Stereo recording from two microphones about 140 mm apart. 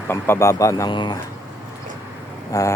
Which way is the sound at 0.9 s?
35° left (ahead or behind).